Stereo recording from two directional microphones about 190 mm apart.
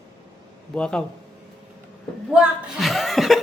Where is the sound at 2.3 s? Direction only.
5° right (ahead or behind).